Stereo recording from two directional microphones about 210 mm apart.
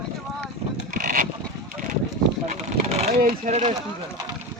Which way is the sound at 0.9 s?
40° right (ahead or behind).